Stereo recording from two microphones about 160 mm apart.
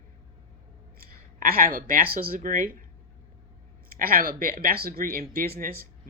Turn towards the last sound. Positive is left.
turn(degrees=-65)  # may be behind; listen again after turning